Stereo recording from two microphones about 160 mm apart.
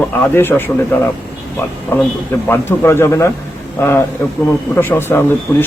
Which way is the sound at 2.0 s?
10° left (ahead or behind).